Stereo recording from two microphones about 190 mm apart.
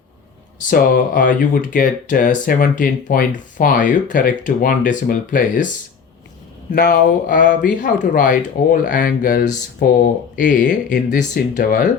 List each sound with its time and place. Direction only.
0.7 s speech: 45° left (ahead or behind)
6.7 s speech: 45° left (ahead or behind)